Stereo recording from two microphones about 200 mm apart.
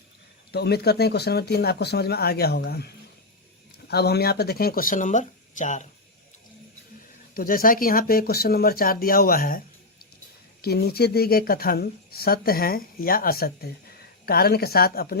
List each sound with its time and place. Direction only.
0.5 s speech: 55° left (ahead or behind); by 5.9 s 35° left (ahead or behind)
7.3 s speech: 45° left (ahead or behind)
10.6 s speech: 50° left (ahead or behind)